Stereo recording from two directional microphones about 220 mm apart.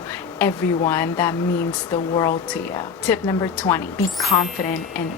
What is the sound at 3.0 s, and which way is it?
Speech, 10° left (ahead or behind).